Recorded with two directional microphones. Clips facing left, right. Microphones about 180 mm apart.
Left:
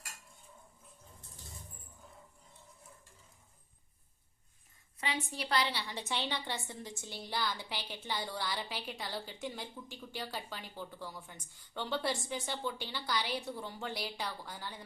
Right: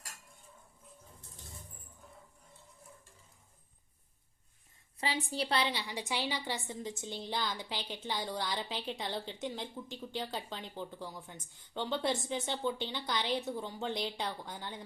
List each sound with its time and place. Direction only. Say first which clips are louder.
4.9 s a woman's voice: right 3 dB; 30° right (ahead or behind)